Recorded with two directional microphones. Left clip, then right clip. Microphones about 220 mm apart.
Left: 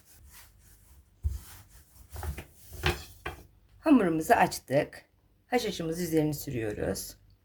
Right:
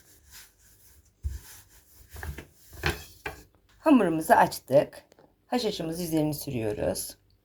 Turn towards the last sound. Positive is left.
turn(degrees=-5)  # may be behind; listen again after turning